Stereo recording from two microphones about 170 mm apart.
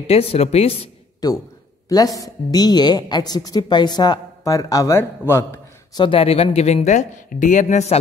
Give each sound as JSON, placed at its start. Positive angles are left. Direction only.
{"t": 0.0, "sound": "speech", "side_deg": 35}
{"t": 1.2, "sound": "a woman's voice", "side_deg": 20}
{"t": 5.9, "sound": "speech", "side_deg": 30}